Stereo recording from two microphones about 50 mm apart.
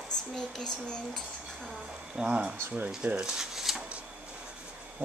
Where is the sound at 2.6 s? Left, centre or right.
Right.